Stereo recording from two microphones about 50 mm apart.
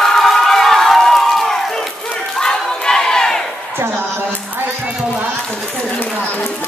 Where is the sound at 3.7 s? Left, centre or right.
Right.